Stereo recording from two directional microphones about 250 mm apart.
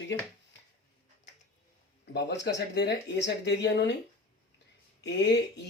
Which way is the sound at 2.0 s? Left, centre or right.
Left.